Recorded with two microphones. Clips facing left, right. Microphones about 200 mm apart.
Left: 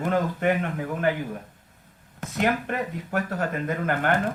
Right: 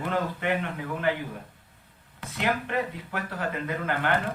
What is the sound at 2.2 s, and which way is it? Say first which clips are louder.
Speech: left 4 dB; 45° left (ahead or behind).